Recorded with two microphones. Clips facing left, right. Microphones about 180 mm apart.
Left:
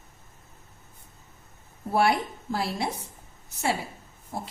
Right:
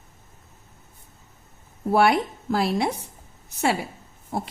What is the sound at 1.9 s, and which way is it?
Speech, 85° right.